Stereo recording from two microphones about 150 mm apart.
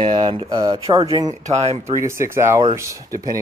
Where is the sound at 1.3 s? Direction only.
50° right (ahead or behind).